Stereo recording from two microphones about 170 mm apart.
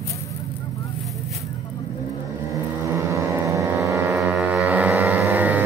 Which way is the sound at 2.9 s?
20° right (ahead or behind).